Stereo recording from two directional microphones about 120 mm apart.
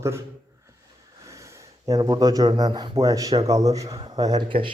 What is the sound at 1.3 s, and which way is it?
Speech, 25° right (ahead or behind).